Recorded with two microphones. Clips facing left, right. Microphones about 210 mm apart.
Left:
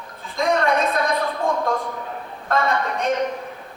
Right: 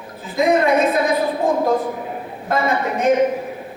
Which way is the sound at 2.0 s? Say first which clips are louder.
Right 4 dB; 10° right (ahead or behind).